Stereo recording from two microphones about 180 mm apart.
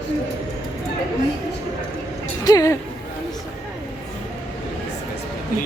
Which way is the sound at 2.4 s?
20° left (ahead or behind).